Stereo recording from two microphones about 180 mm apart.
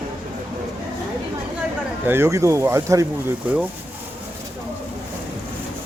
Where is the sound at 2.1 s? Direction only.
15° right (ahead or behind).